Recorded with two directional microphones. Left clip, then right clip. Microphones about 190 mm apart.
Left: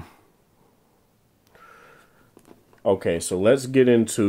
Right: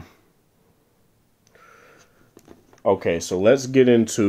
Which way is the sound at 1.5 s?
25° left (ahead or behind).